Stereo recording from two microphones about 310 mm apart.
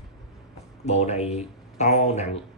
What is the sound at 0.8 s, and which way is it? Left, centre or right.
Speech, centre.